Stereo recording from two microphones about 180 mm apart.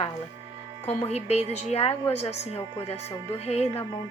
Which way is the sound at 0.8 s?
35° left (ahead or behind).